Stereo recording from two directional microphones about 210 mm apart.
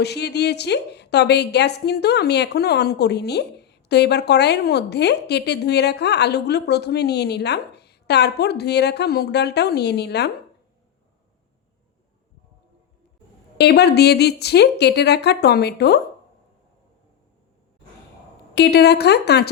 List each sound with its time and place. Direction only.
0.0 s a woman's voice: 50° left (ahead or behind)
13.6 s a woman's voice: 50° left (ahead or behind)
18.5 s a woman's voice: 50° left (ahead or behind)